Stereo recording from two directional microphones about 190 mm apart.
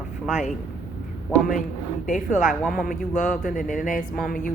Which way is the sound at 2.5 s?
Centre (ahead or behind).